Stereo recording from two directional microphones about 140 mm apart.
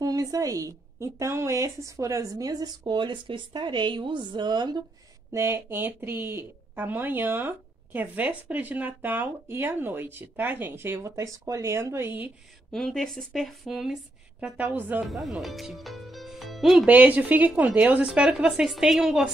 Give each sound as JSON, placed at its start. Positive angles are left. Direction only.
{"t": 0.0, "sound": "a woman's voice", "side_deg": -25}
{"t": 5.3, "sound": "a woman's voice", "side_deg": -20}
{"t": 12.7, "sound": "a woman's voice", "side_deg": 5}
{"t": 15.0, "sound": "speech", "side_deg": 0}